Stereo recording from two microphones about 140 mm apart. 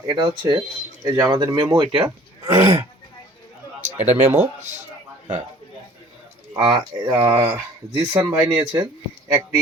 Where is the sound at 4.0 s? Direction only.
15° right (ahead or behind).